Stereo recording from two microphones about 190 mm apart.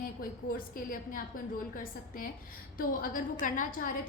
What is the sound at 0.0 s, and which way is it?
A woman's voice, 50° left (ahead or behind).